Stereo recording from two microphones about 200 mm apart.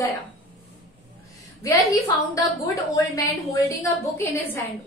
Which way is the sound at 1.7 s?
15° left (ahead or behind).